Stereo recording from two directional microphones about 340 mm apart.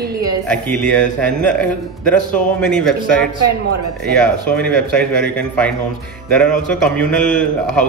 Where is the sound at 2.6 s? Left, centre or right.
Centre.